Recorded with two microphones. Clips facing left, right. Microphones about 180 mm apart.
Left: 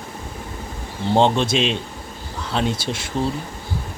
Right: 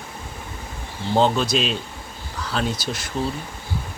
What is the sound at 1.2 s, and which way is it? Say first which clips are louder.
Speech: left 2 dB; 25° left (ahead or behind).